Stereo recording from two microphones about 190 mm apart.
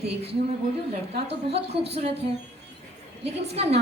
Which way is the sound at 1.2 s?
30° right (ahead or behind).